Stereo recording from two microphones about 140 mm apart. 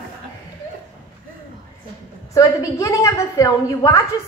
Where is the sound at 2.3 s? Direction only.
20° left (ahead or behind).